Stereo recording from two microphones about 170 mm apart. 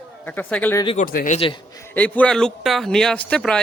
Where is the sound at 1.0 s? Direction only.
50° left (ahead or behind).